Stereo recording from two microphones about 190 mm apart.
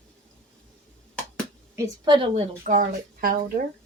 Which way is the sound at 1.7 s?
20° right (ahead or behind).